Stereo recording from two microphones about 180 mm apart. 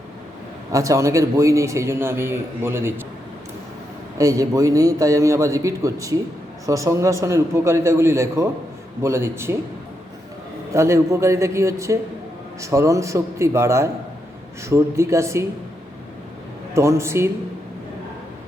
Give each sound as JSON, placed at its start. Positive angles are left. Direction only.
{"t": 0.7, "sound": "a man's voice", "side_deg": -20}
{"t": 4.2, "sound": "a man's voice", "side_deg": -20}
{"t": 10.8, "sound": "a man's voice", "side_deg": -15}
{"t": 16.7, "sound": "a man's voice", "side_deg": -15}